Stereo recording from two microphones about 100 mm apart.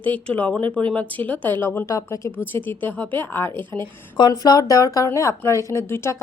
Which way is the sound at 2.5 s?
20° left (ahead or behind).